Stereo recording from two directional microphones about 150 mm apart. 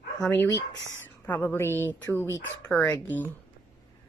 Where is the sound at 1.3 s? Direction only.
15° left (ahead or behind).